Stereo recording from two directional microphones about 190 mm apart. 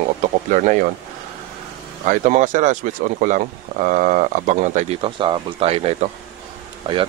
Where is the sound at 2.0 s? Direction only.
40° right (ahead or behind).